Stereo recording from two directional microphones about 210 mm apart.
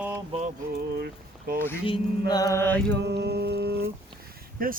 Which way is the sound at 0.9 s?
45° right (ahead or behind).